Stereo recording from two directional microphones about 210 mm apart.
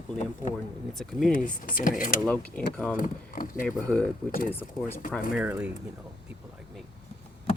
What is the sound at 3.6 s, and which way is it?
Speech, 5° left (ahead or behind).